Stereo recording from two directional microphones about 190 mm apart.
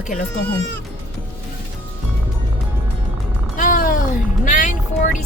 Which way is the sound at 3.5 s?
40° left (ahead or behind).